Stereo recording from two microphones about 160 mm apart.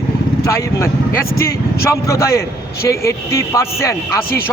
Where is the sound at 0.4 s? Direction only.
20° left (ahead or behind).